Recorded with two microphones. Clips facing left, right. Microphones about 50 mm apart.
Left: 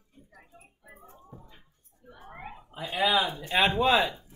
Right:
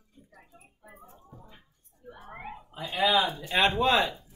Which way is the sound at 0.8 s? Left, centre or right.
Centre.